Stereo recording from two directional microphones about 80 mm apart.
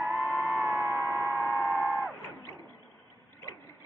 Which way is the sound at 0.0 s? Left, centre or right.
Right.